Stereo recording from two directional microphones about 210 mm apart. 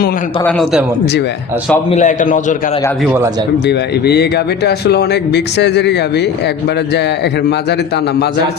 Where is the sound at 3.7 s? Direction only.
55° left (ahead or behind).